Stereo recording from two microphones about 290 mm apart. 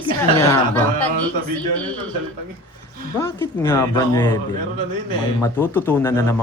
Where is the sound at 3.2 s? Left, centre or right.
Centre.